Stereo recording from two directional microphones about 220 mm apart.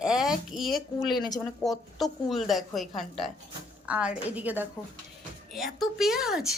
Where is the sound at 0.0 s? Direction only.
Centre (ahead or behind).